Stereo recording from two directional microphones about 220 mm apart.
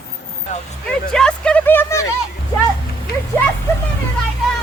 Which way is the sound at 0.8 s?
5° left (ahead or behind).